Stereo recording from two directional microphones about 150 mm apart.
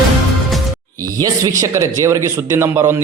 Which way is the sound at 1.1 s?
25° right (ahead or behind).